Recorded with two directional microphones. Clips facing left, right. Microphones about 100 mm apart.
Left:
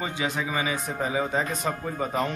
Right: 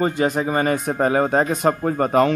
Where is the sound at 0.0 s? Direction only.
50° right (ahead or behind).